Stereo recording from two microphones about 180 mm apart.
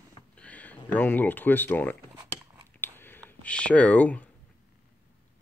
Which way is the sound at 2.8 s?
10° left (ahead or behind).